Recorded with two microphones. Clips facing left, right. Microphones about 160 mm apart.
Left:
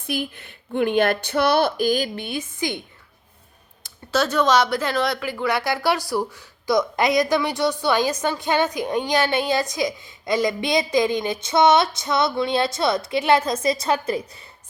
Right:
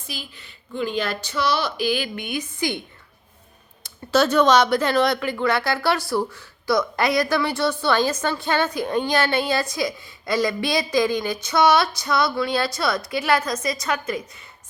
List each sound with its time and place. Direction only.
0.1 s speech: 55° left (ahead or behind); by 2.8 s 20° left (ahead or behind)
3.8 s speech: centre (ahead or behind); by 14.4 s 30° left (ahead or behind)